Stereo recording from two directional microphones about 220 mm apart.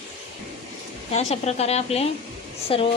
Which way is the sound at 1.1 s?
30° left (ahead or behind).